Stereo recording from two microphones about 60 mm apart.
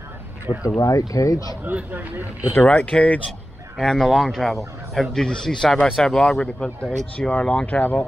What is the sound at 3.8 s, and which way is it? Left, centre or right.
Speech, centre.